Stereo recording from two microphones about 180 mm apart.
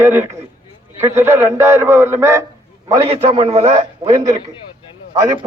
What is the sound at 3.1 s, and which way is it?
A man's voice, 35° right (ahead or behind).